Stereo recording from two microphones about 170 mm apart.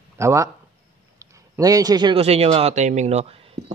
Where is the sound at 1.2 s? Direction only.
20° right (ahead or behind).